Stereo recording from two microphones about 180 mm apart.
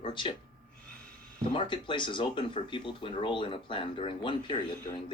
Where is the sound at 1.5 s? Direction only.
25° left (ahead or behind).